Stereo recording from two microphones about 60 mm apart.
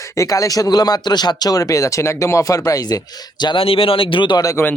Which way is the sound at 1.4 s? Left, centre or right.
Left.